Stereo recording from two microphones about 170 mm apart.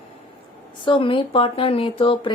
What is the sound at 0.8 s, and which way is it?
Speech, 30° left (ahead or behind).